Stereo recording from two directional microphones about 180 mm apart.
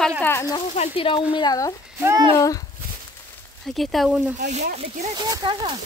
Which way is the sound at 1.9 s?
15° right (ahead or behind).